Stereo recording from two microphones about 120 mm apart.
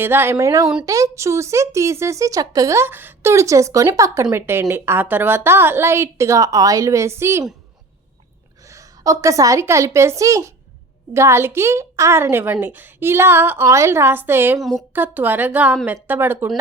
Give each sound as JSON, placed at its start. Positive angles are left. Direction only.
{"t": 0.0, "sound": "speech", "side_deg": -20}
{"t": 8.6, "sound": "a woman's voice", "side_deg": -25}